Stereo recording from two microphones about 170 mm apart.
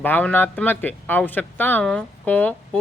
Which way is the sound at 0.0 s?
10° left (ahead or behind).